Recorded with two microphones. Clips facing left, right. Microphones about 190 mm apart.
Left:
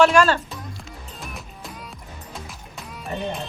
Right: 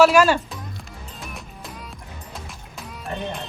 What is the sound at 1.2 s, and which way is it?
Music, centre (ahead or behind).